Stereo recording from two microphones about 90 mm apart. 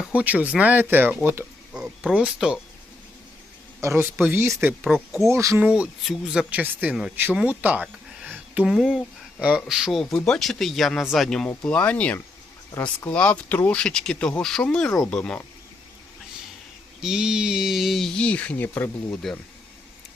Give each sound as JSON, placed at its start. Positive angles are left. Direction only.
{"t": 0.0, "sound": "speech", "side_deg": -15}
{"t": 1.7, "sound": "a sound", "side_deg": -10}
{"t": 2.1, "sound": "speech", "side_deg": -10}
{"t": 3.8, "sound": "speech", "side_deg": -30}
{"t": 4.9, "sound": "speech", "side_deg": 0}
{"t": 5.3, "sound": "speech", "side_deg": -35}
{"t": 5.5, "sound": "speech", "side_deg": -10}
{"t": 6.5, "sound": "speech", "side_deg": -15}
{"t": 7.3, "sound": "a sound", "side_deg": -15}
{"t": 8.7, "sound": "speech", "side_deg": -5}
{"t": 17.0, "sound": "speech", "side_deg": -5}
{"t": 19.1, "sound": "speech", "side_deg": 10}